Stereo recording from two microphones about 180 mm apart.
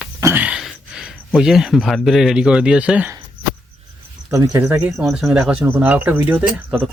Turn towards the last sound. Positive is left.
turn(degrees=-10)  # may be behind; listen again after turning